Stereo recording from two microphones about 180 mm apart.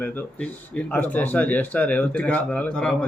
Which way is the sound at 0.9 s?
10° left (ahead or behind).